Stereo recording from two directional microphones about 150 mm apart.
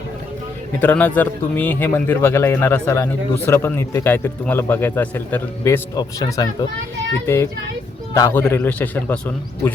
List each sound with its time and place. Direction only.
0.8 s a man's voice: 10° left (ahead or behind)
8.1 s a man's voice: 15° left (ahead or behind)